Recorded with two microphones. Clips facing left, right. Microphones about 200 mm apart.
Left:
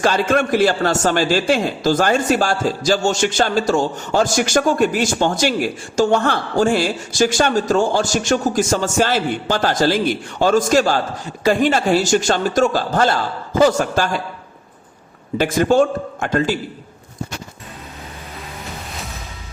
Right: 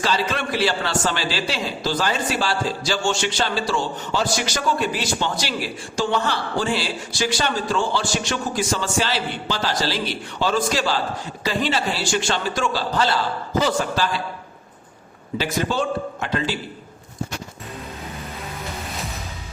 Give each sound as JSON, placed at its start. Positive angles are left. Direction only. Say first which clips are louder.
{"t": 0.0, "sound": "a man's voice", "louder": "left 7 dB", "side_deg": 50}
{"t": 15.4, "sound": "a man's voice", "louder": "left 9 dB", "side_deg": 50}